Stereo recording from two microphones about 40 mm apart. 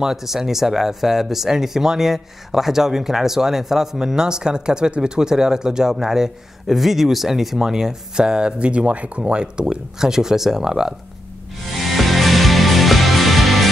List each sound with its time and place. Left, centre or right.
0.0 s speech: centre; by 9.2 s right
9.2 s speech: right
11.8 s music: centre